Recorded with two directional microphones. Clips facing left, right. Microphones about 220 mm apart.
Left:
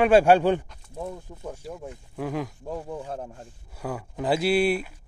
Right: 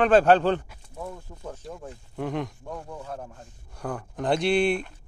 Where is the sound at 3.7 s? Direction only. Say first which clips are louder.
Even; 5° left (ahead or behind).